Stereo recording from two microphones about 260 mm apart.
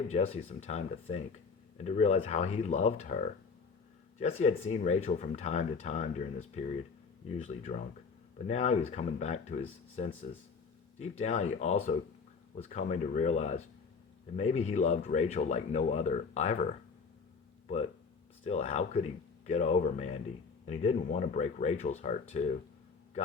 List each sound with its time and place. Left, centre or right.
0.1 s speech: left
18.4 s speech: left